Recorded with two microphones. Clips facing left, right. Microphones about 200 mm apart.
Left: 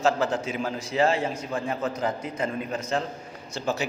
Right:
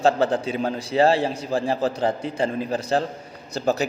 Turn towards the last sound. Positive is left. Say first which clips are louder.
# right 6 dB
turn(degrees=-40)  # may be behind; listen again after turning